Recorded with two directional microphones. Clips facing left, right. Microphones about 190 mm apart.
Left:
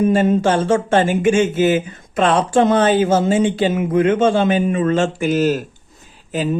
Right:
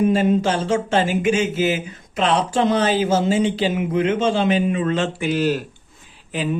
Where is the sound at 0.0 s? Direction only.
50° left (ahead or behind).